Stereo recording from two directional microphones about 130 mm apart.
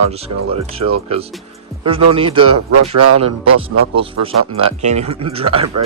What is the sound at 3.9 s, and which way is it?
Speech, 45° right (ahead or behind).